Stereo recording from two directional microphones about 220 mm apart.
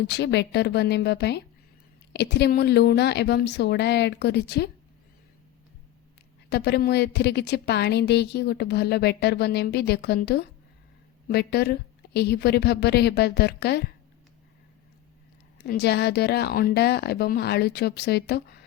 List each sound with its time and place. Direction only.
0.1 s a woman's voice: 50° left (ahead or behind)
6.5 s a woman's voice: 50° left (ahead or behind)
15.6 s a woman's voice: 50° left (ahead or behind)